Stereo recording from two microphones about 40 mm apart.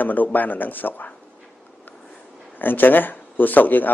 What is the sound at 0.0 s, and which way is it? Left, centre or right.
Speech, left.